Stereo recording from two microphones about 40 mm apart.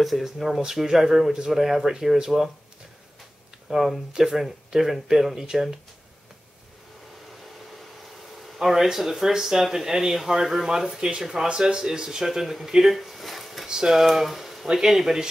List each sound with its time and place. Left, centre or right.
0.0 s speech: centre
3.7 s speech: centre
8.5 s speech: centre
11.0 s speech: centre
13.7 s speech: centre